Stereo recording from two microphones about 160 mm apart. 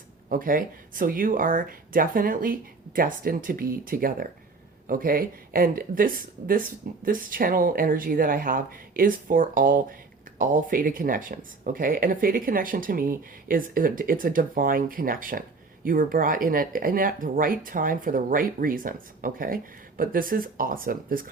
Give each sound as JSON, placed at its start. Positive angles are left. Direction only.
{"t": 0.3, "sound": "speech", "side_deg": -60}